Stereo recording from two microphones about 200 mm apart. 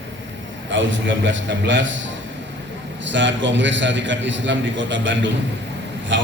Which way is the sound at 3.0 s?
65° right (ahead or behind).